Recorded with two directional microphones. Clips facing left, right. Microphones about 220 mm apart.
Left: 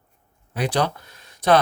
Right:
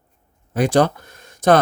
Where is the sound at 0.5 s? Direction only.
45° right (ahead or behind).